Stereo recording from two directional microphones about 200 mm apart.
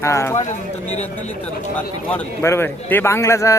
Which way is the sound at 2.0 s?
10° left (ahead or behind).